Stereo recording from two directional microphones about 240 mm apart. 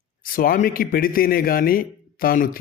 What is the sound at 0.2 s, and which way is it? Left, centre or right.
Speech, left.